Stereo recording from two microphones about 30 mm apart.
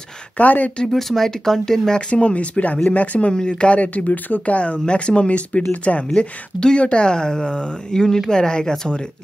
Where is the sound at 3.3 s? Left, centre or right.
Left.